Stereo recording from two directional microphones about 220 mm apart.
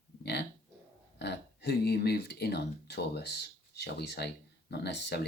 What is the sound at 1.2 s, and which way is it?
Speech, 50° left (ahead or behind).